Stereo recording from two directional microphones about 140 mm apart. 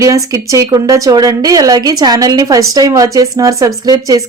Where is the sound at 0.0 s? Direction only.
25° right (ahead or behind).